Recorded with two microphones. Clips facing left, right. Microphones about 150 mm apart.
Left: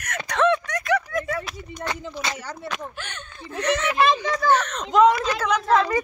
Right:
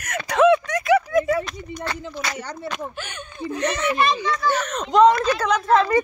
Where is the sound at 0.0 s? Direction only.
10° right (ahead or behind).